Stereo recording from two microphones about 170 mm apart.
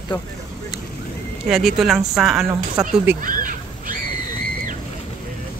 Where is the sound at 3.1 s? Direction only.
55° right (ahead or behind).